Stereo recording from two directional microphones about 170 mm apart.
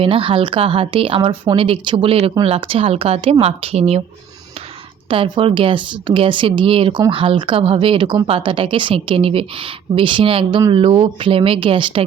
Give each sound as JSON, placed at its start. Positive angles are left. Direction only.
{"t": 0.0, "sound": "speech", "side_deg": -30}
{"t": 5.0, "sound": "speech", "side_deg": -30}